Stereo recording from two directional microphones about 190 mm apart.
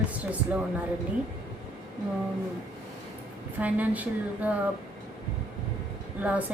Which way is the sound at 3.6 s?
10° right (ahead or behind).